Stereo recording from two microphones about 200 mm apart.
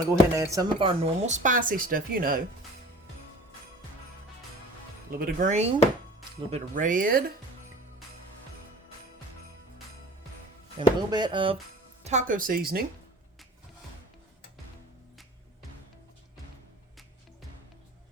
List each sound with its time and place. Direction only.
0.1 s speech: 15° right (ahead or behind); by 2.4 s 45° right (ahead or behind)
5.1 s speech: 45° right (ahead or behind)
10.8 s speech: 25° right (ahead or behind)
12.0 s speech: 40° right (ahead or behind)